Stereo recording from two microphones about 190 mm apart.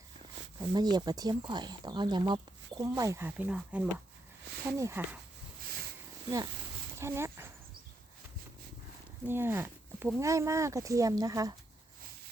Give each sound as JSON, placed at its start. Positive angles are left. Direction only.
{"t": 0.6, "sound": "speech", "side_deg": -20}
{"t": 7.0, "sound": "speech", "side_deg": -15}
{"t": 9.2, "sound": "speech", "side_deg": -10}